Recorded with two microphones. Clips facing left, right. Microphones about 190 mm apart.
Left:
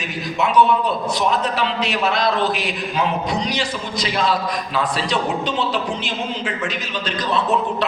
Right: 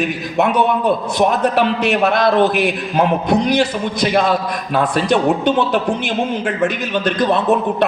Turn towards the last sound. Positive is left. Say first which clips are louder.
# right 8 dB
turn(degrees=-55)  # may be behind; listen again after turning